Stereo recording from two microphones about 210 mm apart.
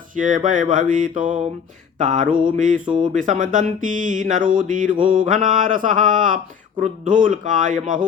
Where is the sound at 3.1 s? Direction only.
35° right (ahead or behind).